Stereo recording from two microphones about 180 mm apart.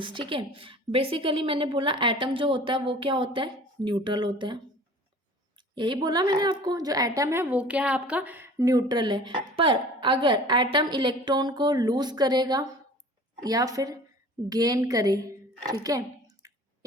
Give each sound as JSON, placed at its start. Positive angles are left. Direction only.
{"t": 0.0, "sound": "a woman's voice", "side_deg": -25}
{"t": 5.7, "sound": "a woman's voice", "side_deg": -25}